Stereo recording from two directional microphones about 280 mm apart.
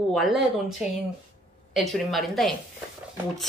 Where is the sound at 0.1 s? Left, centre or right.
Centre.